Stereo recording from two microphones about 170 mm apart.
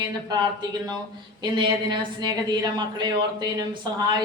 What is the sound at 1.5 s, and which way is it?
A woman's voice, 25° right (ahead or behind).